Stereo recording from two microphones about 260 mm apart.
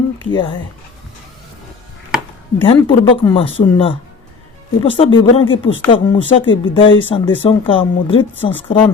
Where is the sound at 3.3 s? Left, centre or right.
Left.